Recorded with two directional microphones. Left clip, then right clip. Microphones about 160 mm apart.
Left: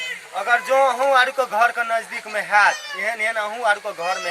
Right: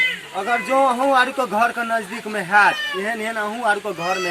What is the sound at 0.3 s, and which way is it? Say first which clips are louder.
A man's voice: left 2 dB; centre (ahead or behind).